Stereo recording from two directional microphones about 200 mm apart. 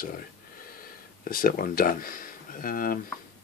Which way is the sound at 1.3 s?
45° left (ahead or behind).